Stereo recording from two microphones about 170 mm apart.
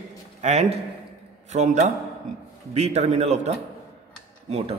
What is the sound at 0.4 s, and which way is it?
A man's voice, 40° right (ahead or behind).